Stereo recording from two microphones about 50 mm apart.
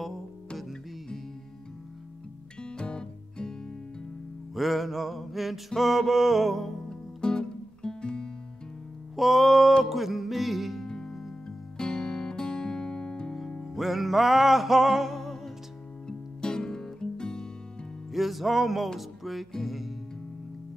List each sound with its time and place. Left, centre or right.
0.6 s music: centre
2.6 s music: centre
4.6 s music: centre
6.9 s music: centre
9.1 s music: centre
10.9 s music: centre
11.8 s guitar: centre
13.7 s music: centre
16.1 s music: centre
18.1 s music: centre